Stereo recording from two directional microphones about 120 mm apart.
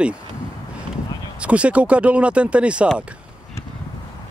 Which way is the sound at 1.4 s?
10° right (ahead or behind).